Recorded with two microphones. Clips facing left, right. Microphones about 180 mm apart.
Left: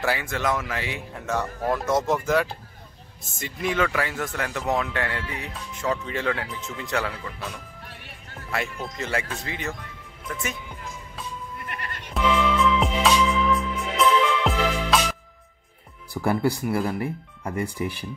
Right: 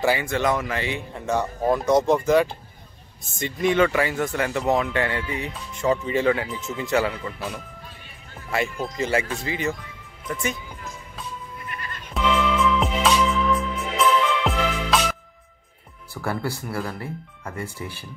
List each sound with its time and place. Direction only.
0.0 s speech: centre (ahead or behind)
11.6 s music: 65° left (ahead or behind)
12.1 s music: centre (ahead or behind)
16.1 s speech: 15° left (ahead or behind)